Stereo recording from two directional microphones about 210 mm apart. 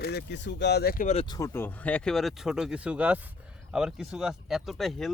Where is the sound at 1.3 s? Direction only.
15° left (ahead or behind).